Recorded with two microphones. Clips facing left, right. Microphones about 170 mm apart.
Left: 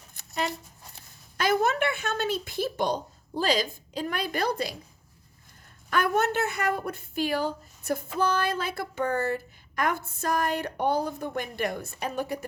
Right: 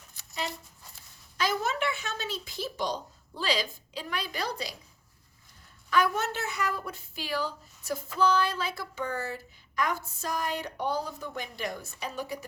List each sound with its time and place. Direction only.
0.1 s dog: 55° left (ahead or behind)
1.4 s a woman's voice: 55° left (ahead or behind)
5.9 s a woman's voice: 55° left (ahead or behind)